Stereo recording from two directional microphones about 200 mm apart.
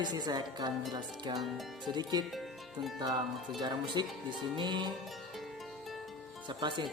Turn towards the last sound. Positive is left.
turn(degrees=-25)  # may be behind; listen again after turning